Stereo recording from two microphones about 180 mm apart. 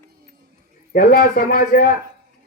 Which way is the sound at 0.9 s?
55° left (ahead or behind).